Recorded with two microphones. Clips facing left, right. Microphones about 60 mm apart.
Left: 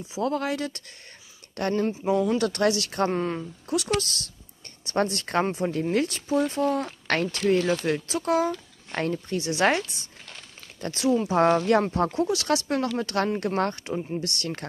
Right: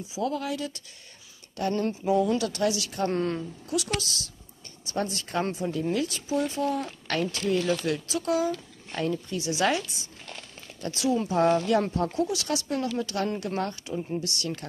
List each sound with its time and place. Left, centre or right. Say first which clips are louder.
0.2 s speech: left 3 dB; left
3.1 s speech: even; centre
3.6 s speech: left 5 dB; left